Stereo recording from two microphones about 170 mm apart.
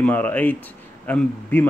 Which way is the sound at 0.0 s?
10° left (ahead or behind).